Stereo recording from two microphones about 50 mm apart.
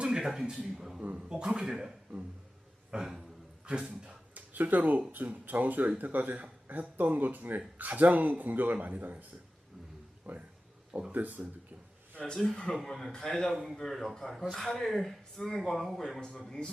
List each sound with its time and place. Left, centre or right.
0.0 s speech: centre
2.9 s speech: centre
4.4 s a sound: right
5.1 s speech: right
10.3 s speech: right
12.2 s speech: centre
12.7 s speech: centre
13.5 s speech: centre